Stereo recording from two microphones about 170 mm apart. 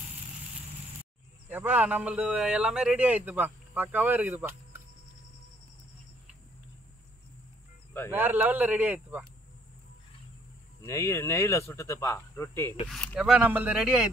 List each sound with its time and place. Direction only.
1.5 s a man's voice: 10° right (ahead or behind)
8.1 s a man's voice: 10° right (ahead or behind)
10.9 s speech: 15° left (ahead or behind)
12.8 s speech: 5° left (ahead or behind)
13.2 s a man's voice: 10° right (ahead or behind)